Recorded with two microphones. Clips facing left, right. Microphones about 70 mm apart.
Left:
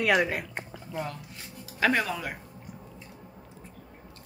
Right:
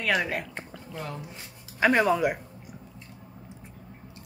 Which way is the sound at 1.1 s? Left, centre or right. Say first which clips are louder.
Right 3 dB; right.